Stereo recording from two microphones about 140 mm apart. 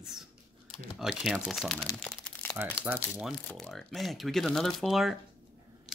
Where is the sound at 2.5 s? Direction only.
10° right (ahead or behind).